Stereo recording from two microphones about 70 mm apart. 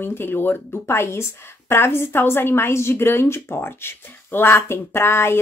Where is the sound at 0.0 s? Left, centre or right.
Left.